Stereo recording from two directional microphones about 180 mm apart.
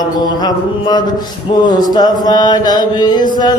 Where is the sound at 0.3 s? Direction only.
25° left (ahead or behind).